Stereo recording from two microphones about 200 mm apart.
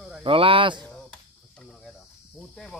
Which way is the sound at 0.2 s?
25° right (ahead or behind).